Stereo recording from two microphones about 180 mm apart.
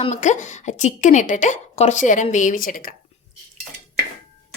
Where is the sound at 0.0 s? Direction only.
40° left (ahead or behind).